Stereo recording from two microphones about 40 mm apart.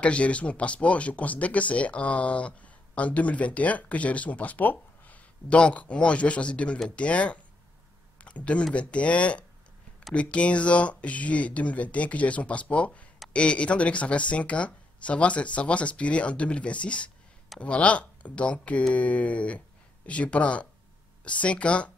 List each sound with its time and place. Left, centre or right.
0.0 s speech: left
5.6 s speech: left
8.2 s a sound: left
8.7 s speech: left